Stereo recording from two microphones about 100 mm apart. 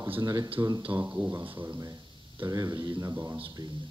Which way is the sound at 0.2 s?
40° right (ahead or behind).